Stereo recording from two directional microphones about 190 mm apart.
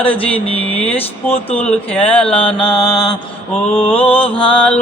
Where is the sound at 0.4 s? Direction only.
30° left (ahead or behind).